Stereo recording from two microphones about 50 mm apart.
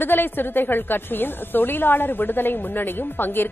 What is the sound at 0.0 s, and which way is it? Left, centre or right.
A woman's voice, left.